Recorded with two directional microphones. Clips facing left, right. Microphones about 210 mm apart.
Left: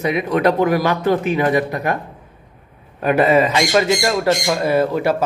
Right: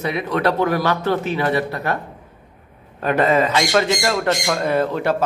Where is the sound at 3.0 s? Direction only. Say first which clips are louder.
Left 3 dB; 10° left (ahead or behind).